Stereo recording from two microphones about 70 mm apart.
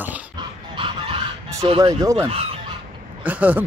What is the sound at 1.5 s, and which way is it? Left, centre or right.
Speech, right.